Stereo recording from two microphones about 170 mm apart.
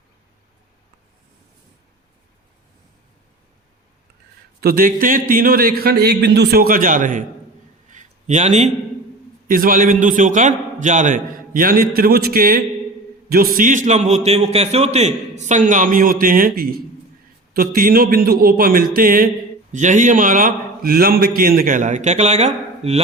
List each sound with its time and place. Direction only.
4.6 s speech: 60° right (ahead or behind)
7.9 s a sound: 45° right (ahead or behind)
9.5 s a man's voice: 55° right (ahead or behind)
19.7 s a man's voice: 45° right (ahead or behind)